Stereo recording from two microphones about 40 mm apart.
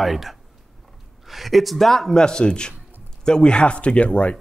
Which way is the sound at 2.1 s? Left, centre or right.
Centre.